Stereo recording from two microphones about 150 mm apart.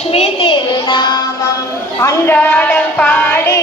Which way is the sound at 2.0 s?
10° left (ahead or behind).